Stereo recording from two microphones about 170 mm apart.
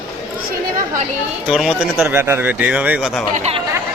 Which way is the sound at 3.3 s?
40° right (ahead or behind).